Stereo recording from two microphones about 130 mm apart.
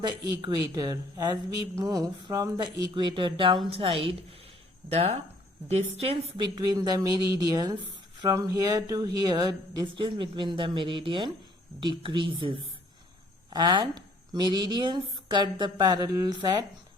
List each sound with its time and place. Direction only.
0.4 s a woman's voice: 30° right (ahead or behind); by 6.4 s 50° right (ahead or behind)
6.4 s a woman's voice: 30° right (ahead or behind)